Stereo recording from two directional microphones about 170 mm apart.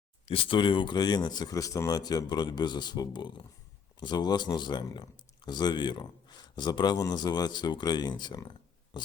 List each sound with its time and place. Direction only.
0.3 s speech: 30° left (ahead or behind)